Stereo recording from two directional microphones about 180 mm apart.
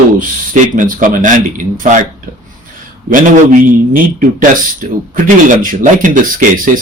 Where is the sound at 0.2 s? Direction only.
50° right (ahead or behind).